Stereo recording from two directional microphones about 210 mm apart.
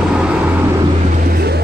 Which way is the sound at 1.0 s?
40° right (ahead or behind).